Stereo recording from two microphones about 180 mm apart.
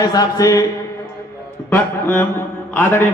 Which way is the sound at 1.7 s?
10° left (ahead or behind).